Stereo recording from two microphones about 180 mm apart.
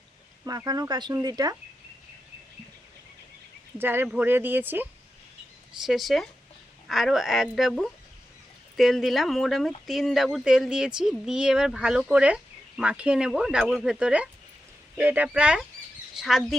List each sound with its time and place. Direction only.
0.4 s speech: 20° right (ahead or behind)
3.8 s speech: 10° right (ahead or behind)